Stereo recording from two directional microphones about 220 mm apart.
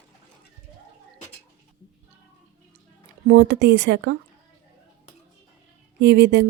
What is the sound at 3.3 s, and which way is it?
Speech, 50° right (ahead or behind).